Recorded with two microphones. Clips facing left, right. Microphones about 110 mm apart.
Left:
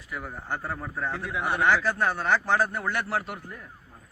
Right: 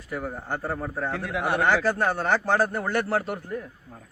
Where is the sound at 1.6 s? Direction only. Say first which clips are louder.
Even; 40° right (ahead or behind).